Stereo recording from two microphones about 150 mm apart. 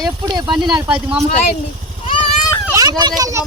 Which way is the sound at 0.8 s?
10° right (ahead or behind).